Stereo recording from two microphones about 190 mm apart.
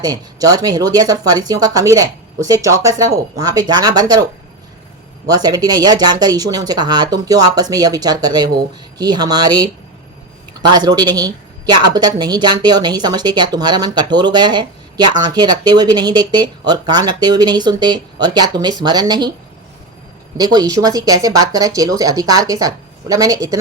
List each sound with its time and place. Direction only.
0.0 s a woman's voice: 20° right (ahead or behind)
5.3 s a woman's voice: 20° right (ahead or behind)
20.3 s a woman's voice: 20° right (ahead or behind)